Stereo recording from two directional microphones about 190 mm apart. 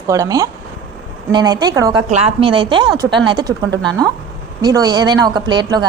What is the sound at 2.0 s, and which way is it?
A woman's voice, 35° right (ahead or behind).